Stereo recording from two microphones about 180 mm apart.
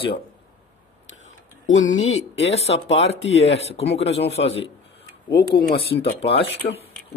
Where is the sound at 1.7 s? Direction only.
40° left (ahead or behind).